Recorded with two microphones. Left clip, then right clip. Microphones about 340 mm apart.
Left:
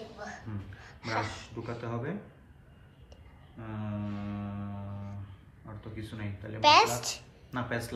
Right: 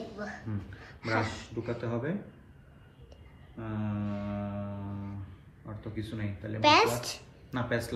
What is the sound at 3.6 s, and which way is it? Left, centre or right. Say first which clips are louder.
Speech: right 4 dB; centre.